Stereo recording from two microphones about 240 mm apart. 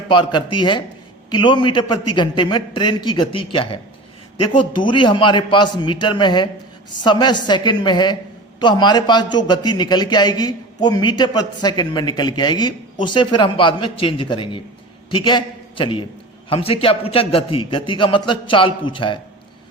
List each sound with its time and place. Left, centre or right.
0.1 s a man's voice: centre
4.9 s a man's voice: centre